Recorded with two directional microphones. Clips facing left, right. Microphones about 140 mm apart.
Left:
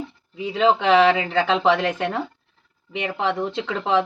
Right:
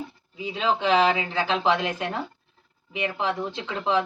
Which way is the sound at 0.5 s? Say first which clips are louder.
Left 5 dB; 75° left (ahead or behind).